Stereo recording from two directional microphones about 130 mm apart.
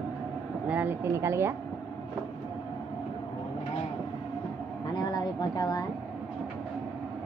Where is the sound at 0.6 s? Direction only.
15° right (ahead or behind).